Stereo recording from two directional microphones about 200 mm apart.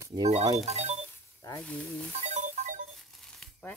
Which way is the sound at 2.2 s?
35° right (ahead or behind).